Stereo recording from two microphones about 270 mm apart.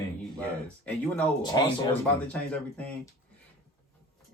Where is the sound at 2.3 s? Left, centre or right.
Centre.